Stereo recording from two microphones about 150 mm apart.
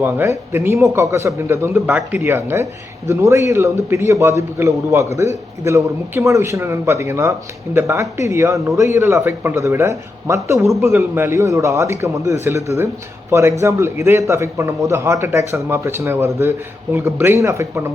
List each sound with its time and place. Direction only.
0.0 s a man's voice: 15° right (ahead or behind)